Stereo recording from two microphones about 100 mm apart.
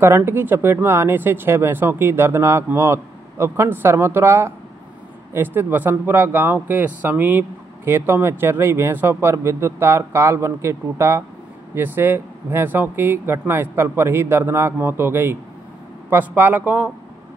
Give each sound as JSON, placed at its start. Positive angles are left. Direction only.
{"t": 0.0, "sound": "a man's voice", "side_deg": -25}